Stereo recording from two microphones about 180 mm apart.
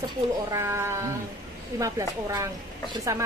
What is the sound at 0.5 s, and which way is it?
Speech, 15° right (ahead or behind).